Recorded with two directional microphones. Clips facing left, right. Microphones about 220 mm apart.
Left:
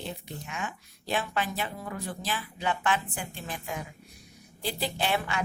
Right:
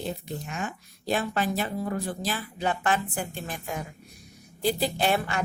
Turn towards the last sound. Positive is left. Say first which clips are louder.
# right 3 dB
turn(degrees=-45)  # may be behind; listen again after turning